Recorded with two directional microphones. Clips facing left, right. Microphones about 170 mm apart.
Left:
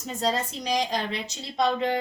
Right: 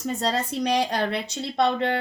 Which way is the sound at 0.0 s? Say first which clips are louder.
Right 2 dB; 65° right (ahead or behind).